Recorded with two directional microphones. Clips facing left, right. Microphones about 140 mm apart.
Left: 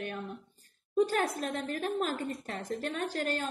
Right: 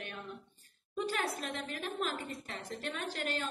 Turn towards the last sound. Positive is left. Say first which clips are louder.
# left 5 dB
turn(degrees=45)  # may be behind; listen again after turning